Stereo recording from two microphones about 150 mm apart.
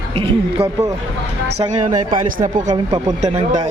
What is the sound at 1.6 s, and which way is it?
Speech, 55° right (ahead or behind).